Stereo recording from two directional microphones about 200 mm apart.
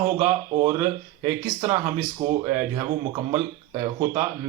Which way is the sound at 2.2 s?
40° right (ahead or behind).